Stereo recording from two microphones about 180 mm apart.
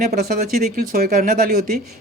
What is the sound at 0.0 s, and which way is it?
A man's voice, 60° right (ahead or behind).